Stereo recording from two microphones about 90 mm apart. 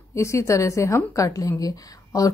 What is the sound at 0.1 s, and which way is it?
A woman's voice, 35° left (ahead or behind).